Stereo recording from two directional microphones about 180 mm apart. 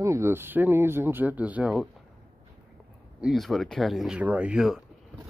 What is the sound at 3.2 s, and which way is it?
Speech, centre (ahead or behind).